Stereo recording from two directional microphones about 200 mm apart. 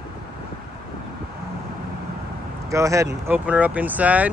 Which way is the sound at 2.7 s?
15° right (ahead or behind).